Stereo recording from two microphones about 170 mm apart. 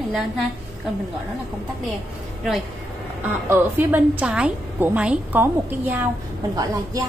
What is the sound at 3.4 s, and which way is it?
A woman's voice, 10° right (ahead or behind).